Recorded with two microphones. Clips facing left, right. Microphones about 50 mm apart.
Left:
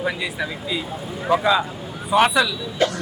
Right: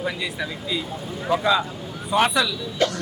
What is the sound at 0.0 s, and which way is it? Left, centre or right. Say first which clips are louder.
Speech: left 3 dB; centre.